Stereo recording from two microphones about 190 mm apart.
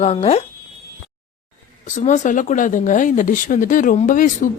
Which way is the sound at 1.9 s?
40° left (ahead or behind).